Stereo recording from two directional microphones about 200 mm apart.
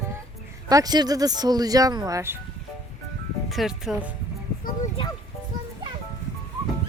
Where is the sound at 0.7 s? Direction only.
20° right (ahead or behind).